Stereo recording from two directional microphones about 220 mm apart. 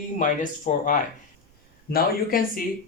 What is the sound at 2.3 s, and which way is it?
Speech, 40° left (ahead or behind).